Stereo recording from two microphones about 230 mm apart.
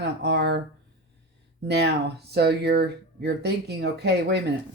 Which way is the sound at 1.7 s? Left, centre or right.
Right.